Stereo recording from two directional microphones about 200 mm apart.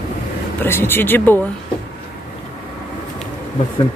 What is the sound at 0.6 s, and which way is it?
Speech, 10° left (ahead or behind).